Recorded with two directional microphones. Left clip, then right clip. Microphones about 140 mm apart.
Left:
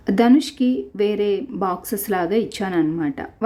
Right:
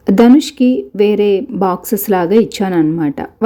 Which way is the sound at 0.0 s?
30° right (ahead or behind).